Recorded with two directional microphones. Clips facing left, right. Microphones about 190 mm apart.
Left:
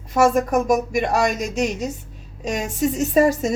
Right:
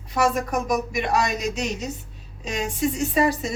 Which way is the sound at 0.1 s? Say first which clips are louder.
Left 6 dB; 50° left (ahead or behind).